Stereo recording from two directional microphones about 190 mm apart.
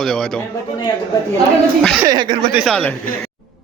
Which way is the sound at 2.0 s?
20° right (ahead or behind).